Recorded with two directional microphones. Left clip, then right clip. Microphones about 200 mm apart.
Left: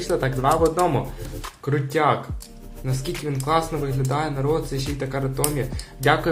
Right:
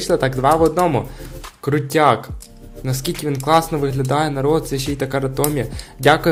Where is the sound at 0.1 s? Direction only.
45° right (ahead or behind).